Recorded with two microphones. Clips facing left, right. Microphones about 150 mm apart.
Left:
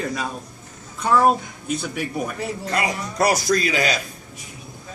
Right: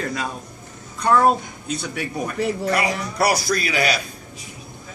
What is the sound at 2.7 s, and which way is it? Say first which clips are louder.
A man's voice: right 2 dB; 25° left (ahead or behind).